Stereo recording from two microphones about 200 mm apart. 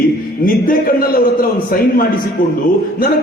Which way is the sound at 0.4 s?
45° left (ahead or behind).